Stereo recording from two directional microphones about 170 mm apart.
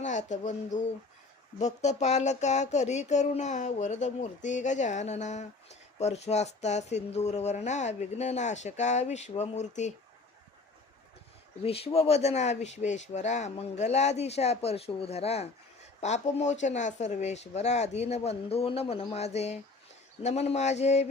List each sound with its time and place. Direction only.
0.0 s speech: 45° left (ahead or behind)
11.6 s speech: 35° left (ahead or behind)